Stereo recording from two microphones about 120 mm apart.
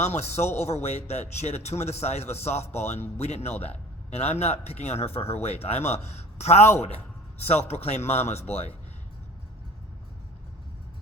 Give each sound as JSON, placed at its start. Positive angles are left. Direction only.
{"t": 0.0, "sound": "a man's voice", "side_deg": 60}